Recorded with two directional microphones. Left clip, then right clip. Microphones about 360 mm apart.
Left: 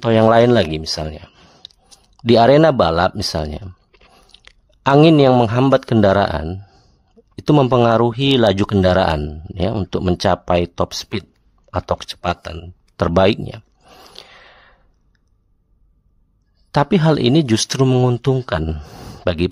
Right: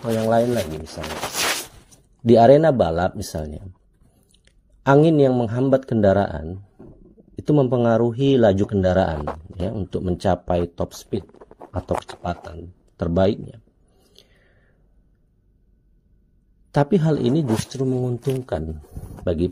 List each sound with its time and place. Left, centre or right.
0.0 s speech: left
2.2 s speech: centre
14.1 s gasp: centre
16.7 s speech: centre
17.7 s speech: left
18.2 s speech: centre